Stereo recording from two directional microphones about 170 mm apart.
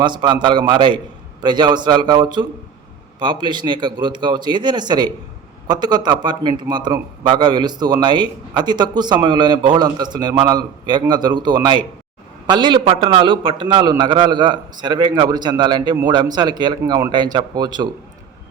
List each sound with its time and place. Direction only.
0.0 s a man's voice: 25° right (ahead or behind)